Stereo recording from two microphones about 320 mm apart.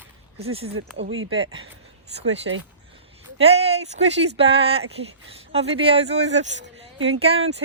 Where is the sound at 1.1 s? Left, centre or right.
Right.